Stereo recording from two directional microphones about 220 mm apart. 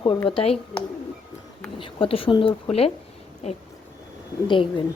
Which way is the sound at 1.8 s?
25° left (ahead or behind).